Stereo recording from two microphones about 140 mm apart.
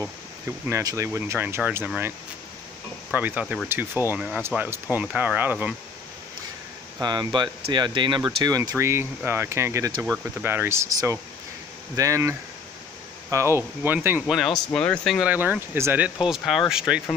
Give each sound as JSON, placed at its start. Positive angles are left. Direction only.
{"t": 0.7, "sound": "speech", "side_deg": -20}
{"t": 3.1, "sound": "speech", "side_deg": -10}
{"t": 7.0, "sound": "speech", "side_deg": -30}
{"t": 10.0, "sound": "speech", "side_deg": -10}
{"t": 14.3, "sound": "speech", "side_deg": 0}
{"t": 15.2, "sound": "speech", "side_deg": -10}